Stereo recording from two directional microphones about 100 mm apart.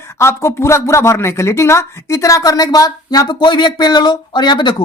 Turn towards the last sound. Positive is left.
turn(degrees=50)  # may be behind; listen again after turning